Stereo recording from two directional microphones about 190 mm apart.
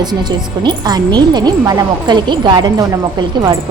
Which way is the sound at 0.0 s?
20° right (ahead or behind).